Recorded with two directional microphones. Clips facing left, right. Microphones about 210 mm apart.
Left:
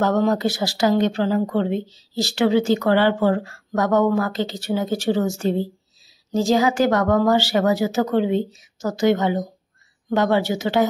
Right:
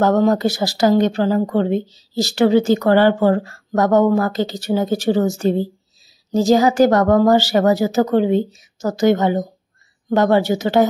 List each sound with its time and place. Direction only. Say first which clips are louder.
0.0 s a woman's voice: right 4 dB; 40° right (ahead or behind)